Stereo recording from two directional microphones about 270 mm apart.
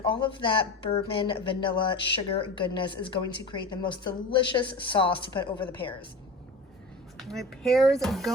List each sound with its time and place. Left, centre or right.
0.0 s speech: centre
7.2 s speech: centre